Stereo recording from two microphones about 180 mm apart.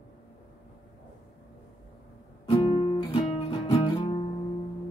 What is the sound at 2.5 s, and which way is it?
Guitar, 35° left (ahead or behind).